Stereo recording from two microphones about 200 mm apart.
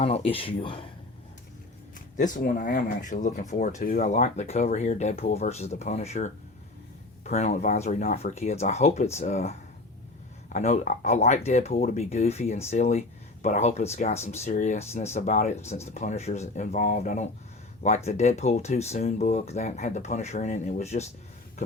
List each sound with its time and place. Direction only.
0.0 s speech: 30° left (ahead or behind)
2.1 s speech: 40° left (ahead or behind)